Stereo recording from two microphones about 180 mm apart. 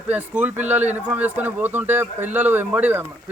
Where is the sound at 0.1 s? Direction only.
10° right (ahead or behind).